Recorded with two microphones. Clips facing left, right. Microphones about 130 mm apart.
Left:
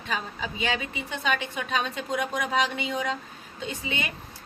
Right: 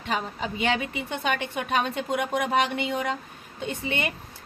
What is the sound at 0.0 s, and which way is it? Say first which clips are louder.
A woman's voice: right 3 dB; 60° right (ahead or behind).